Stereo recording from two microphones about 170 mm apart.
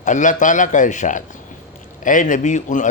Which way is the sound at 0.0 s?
45° left (ahead or behind).